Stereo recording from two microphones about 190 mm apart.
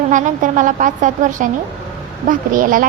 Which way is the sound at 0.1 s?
40° right (ahead or behind).